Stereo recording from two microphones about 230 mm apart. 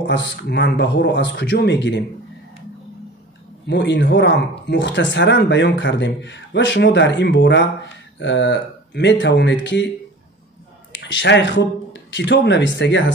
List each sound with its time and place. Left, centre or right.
0.0 s speech: left
3.6 s speech: left
10.9 s speech: left